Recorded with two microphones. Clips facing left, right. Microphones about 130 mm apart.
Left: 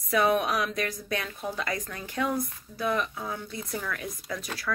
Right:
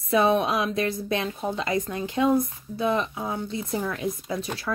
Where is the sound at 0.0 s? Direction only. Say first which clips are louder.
Right 3 dB; 25° right (ahead or behind).